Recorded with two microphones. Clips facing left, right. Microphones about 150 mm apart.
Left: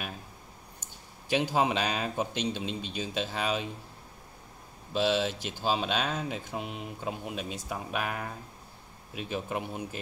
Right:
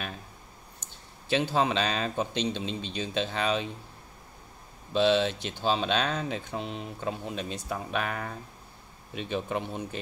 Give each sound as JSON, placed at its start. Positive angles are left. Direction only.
{"t": 1.3, "sound": "speech", "side_deg": 15}
{"t": 4.9, "sound": "speech", "side_deg": 5}